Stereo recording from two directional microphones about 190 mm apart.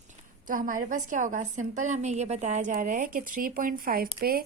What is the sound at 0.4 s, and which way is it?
A woman's voice, 45° right (ahead or behind).